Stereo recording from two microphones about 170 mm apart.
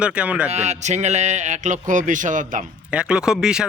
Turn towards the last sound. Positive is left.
turn(degrees=-5)  # may be behind; listen again after turning